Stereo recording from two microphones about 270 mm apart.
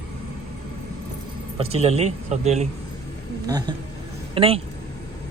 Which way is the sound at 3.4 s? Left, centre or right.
Centre.